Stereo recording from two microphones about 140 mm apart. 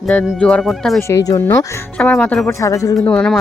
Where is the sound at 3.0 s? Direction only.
5° left (ahead or behind).